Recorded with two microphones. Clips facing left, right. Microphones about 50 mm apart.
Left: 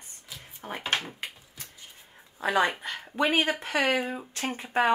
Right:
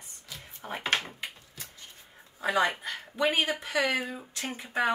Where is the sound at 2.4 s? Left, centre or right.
Left.